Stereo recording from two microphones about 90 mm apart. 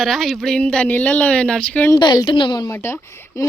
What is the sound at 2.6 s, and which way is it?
Speech, 30° left (ahead or behind).